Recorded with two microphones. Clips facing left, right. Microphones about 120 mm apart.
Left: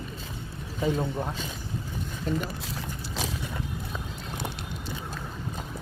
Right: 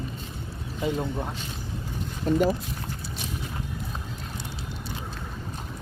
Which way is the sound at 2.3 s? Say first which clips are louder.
Right 5 dB; 45° right (ahead or behind).